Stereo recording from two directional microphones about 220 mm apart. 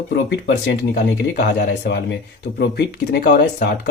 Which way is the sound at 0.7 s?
45° left (ahead or behind).